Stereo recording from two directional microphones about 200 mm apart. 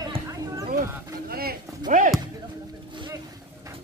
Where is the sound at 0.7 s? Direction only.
50° right (ahead or behind).